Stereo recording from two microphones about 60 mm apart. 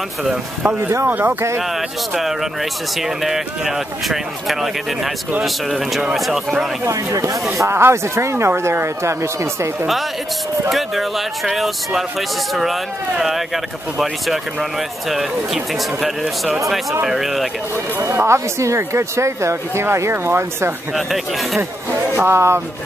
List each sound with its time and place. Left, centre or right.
1.0 s speech: right
3.0 s speech: centre
7.5 s speech: right
10.7 s speech: centre
13.9 s speech: centre
18.0 s speech: right
20.9 s speech: centre
22.2 s speech: right